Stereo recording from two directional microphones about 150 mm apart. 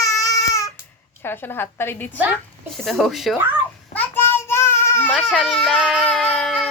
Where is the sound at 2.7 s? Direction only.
Centre (ahead or behind).